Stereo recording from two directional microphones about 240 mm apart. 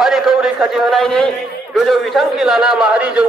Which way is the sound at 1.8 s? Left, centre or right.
Centre.